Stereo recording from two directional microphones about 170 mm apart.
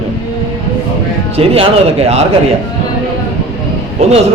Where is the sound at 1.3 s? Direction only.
35° right (ahead or behind).